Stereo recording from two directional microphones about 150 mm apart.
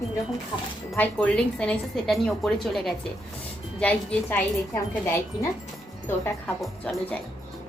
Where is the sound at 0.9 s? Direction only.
10° left (ahead or behind).